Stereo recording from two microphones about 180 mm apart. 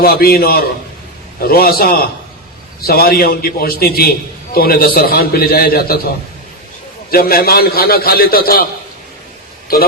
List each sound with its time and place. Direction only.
0.0 s a man's voice: 55° left (ahead or behind)
7.1 s a man's voice: 55° left (ahead or behind)